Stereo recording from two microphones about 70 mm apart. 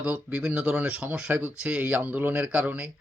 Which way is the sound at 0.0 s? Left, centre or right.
Centre.